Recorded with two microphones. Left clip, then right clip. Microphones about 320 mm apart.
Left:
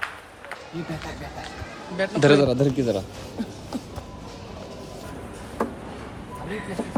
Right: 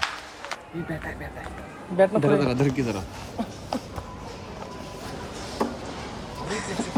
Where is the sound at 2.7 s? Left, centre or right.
Centre.